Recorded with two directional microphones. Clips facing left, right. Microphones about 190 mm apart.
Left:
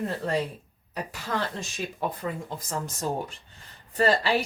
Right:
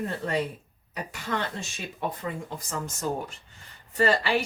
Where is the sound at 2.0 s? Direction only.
35° left (ahead or behind).